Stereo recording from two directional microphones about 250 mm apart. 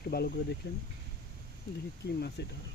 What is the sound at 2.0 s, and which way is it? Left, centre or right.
Speech, left.